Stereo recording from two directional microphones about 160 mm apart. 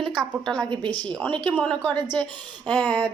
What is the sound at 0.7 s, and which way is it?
Speech, 30° right (ahead or behind).